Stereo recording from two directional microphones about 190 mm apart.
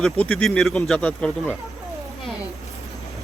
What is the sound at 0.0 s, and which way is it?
Speech, 5° left (ahead or behind).